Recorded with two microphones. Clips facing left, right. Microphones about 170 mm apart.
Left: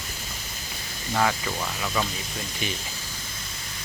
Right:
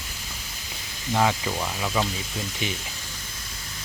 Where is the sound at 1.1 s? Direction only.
10° right (ahead or behind).